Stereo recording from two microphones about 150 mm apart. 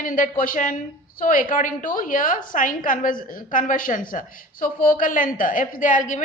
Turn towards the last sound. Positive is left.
turn(degrees=60)  # may be behind; listen again after turning